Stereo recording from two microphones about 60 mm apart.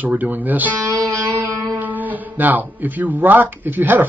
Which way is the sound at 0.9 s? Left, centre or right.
Right.